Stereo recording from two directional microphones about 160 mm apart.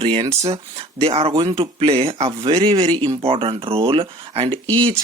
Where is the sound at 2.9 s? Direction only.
20° right (ahead or behind).